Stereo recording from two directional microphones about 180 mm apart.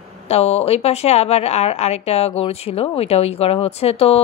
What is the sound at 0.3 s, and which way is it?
Speech, 35° left (ahead or behind).